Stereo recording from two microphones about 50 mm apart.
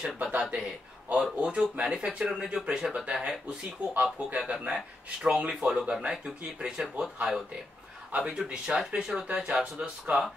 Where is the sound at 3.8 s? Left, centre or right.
Right.